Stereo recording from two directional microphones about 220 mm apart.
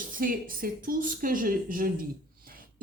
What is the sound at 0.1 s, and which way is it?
A woman's voice, 40° right (ahead or behind).